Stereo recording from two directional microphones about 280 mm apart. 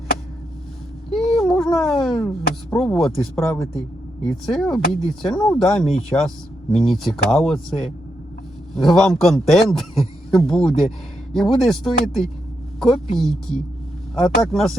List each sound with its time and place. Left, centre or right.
1.1 s a man's voice: centre